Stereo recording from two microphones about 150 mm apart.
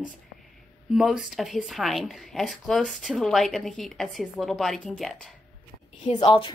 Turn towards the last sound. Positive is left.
turn(degrees=35)  # may be behind; listen again after turning